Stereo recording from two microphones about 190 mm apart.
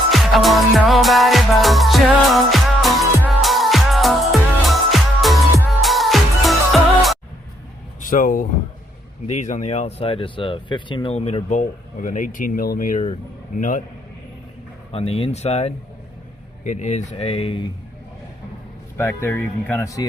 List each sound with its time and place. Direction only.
0.1 s music: centre (ahead or behind)
8.0 s a man's voice: 45° left (ahead or behind)
14.9 s speech: 30° left (ahead or behind)
18.9 s speech: 15° left (ahead or behind)